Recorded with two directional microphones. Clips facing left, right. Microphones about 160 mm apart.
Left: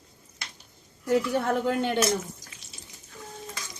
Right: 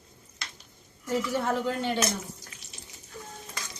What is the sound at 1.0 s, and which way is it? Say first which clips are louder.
Speech: left 4 dB; 55° left (ahead or behind).